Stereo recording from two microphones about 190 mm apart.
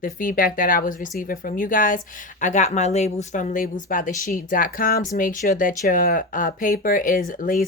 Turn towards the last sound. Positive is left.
turn(degrees=45)  # may be behind; listen again after turning